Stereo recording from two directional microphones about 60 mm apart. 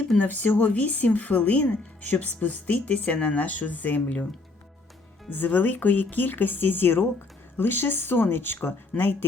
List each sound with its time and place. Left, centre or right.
0.2 s speech: left
5.3 s speech: left